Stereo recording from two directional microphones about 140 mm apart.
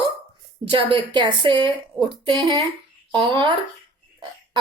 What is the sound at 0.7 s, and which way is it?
Speech, 35° right (ahead or behind).